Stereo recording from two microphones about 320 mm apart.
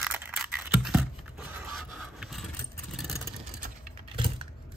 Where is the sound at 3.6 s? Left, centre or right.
Centre.